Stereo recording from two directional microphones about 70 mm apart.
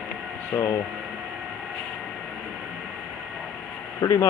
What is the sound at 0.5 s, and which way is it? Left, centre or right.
Speech, left.